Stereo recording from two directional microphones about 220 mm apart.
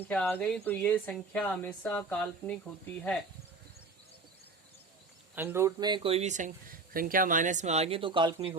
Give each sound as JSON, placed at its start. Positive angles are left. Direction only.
{"t": 0.1, "sound": "speech", "side_deg": 5}
{"t": 5.3, "sound": "speech", "side_deg": -10}